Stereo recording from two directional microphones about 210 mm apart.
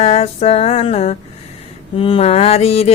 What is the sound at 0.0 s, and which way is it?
Mantra, 30° left (ahead or behind).